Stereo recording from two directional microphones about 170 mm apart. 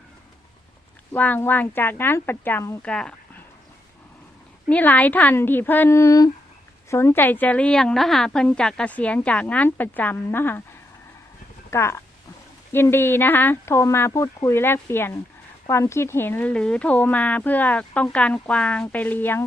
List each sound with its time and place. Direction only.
1.1 s speech: 10° left (ahead or behind)
4.7 s speech: 10° left (ahead or behind)
11.7 s speech: 15° left (ahead or behind)